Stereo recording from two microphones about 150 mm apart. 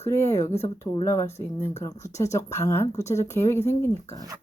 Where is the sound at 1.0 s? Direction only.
20° left (ahead or behind).